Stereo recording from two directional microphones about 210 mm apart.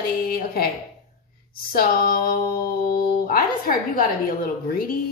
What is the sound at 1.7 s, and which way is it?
Speech, 45° left (ahead or behind).